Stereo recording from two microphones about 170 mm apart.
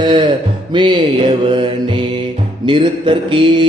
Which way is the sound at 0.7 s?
25° right (ahead or behind).